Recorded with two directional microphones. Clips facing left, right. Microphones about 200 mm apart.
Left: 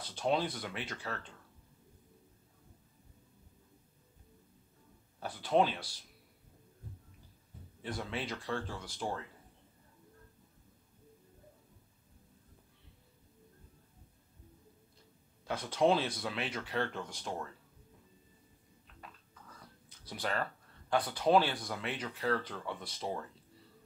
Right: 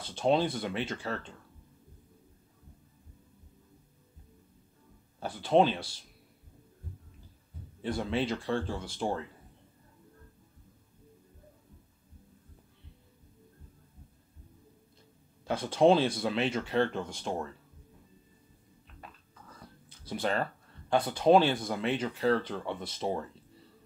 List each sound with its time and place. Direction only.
0.0 s speech: 25° right (ahead or behind)
5.2 s speech: 25° right (ahead or behind)
7.8 s speech: 30° right (ahead or behind)
15.4 s speech: 30° right (ahead or behind)
20.1 s speech: 25° right (ahead or behind)